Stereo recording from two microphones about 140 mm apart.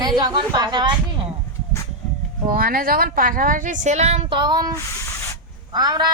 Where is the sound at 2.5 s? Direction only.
90° right; by 4.4 s 50° right (ahead or behind).